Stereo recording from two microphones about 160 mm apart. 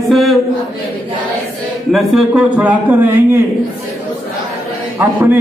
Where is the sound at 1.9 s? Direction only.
Centre (ahead or behind).